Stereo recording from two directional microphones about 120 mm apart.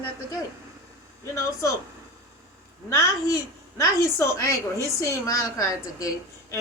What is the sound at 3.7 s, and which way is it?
A woman's voice, 25° left (ahead or behind).